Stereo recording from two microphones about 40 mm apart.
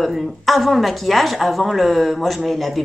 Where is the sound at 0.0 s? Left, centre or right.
Centre.